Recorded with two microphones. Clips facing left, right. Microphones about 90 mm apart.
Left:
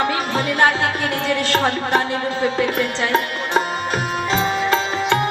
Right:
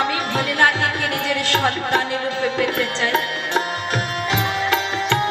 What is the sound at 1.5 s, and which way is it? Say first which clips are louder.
Music: even; 20° left (ahead or behind).